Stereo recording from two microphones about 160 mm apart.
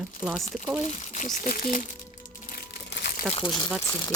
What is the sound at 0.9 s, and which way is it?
Speech, 50° left (ahead or behind).